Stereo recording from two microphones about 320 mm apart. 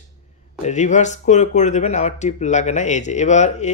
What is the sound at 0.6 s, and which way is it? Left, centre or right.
Speech, left.